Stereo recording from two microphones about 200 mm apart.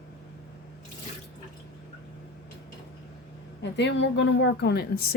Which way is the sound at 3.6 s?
65° left (ahead or behind).